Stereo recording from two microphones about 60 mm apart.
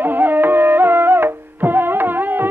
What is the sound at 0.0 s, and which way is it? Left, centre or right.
Music, right.